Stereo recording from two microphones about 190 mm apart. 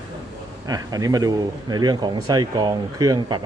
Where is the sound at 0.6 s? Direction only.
20° right (ahead or behind).